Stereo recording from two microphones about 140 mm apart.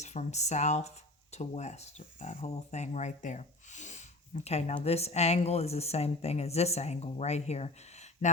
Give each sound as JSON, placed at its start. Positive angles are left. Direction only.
{"t": 0.0, "sound": "speech", "side_deg": 55}